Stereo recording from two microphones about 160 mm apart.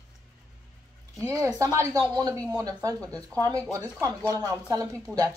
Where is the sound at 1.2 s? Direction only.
15° right (ahead or behind).